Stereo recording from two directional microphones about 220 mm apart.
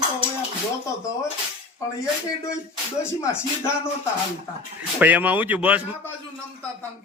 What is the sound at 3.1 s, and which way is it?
Music, 10° left (ahead or behind).